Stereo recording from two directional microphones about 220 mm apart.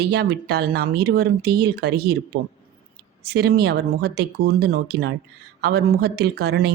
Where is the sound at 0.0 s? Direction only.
45° right (ahead or behind).